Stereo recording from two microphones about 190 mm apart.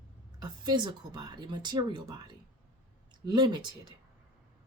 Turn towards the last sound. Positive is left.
turn(degrees=-25)  # may be behind; listen again after turning